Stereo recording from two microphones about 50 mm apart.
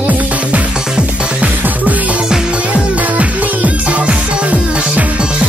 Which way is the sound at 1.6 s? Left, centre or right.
Right.